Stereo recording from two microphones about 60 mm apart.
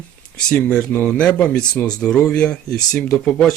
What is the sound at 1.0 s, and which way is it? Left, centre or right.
Speech, centre.